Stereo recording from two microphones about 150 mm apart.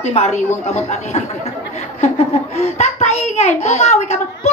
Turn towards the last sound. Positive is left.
turn(degrees=50)  # may be behind; listen again after turning